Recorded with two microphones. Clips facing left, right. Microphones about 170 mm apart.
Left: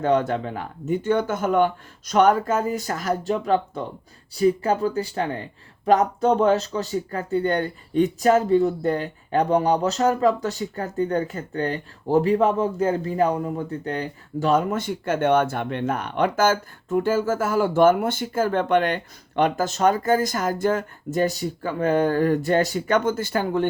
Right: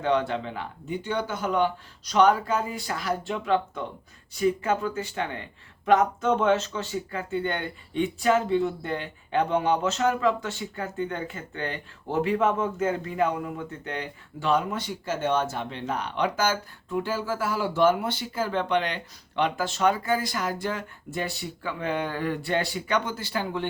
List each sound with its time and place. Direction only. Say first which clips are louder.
0.0 s speech: left 4 dB; 45° left (ahead or behind)